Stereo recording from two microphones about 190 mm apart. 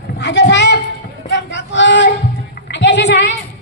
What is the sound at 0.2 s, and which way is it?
Speech, 65° left (ahead or behind).